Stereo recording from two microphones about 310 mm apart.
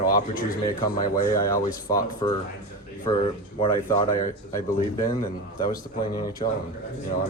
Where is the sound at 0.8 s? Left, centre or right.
Left.